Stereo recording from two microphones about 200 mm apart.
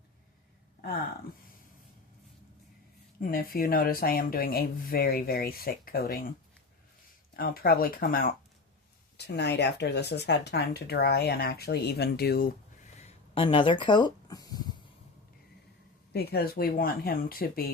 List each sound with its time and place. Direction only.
3.2 s speech: 45° left (ahead or behind)
7.3 s speech: 45° left (ahead or behind)
9.1 s speech: 55° left (ahead or behind)
13.0 s a sound: 30° left (ahead or behind)
16.1 s speech: 50° left (ahead or behind)